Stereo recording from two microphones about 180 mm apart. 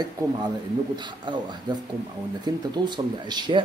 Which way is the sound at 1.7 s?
25° right (ahead or behind).